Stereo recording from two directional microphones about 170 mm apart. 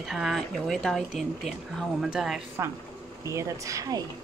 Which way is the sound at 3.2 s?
20° right (ahead or behind).